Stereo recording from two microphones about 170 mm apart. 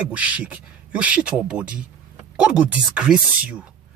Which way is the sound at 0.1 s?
5° right (ahead or behind).